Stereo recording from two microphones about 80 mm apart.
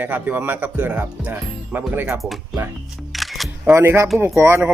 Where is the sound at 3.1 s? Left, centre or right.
Centre.